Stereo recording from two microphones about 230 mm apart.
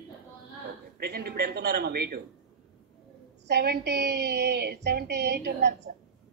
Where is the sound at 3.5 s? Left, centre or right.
Right.